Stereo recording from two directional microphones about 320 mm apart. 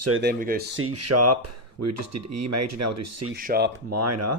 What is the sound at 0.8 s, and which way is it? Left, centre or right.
Speech, right.